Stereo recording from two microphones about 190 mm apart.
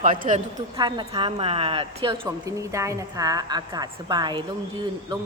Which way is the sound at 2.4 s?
15° right (ahead or behind).